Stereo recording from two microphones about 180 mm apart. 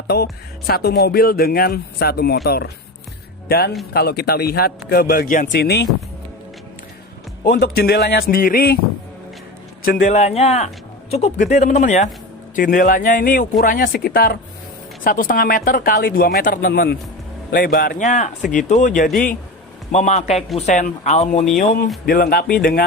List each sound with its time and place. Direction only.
0.1 s speech: 65° left (ahead or behind)
5.5 s speech: 65° left (ahead or behind)
7.4 s speech: 60° left (ahead or behind)
9.8 s speech: 55° left (ahead or behind)
10.1 s speech: 35° left (ahead or behind)
21.6 s speech: 50° left (ahead or behind)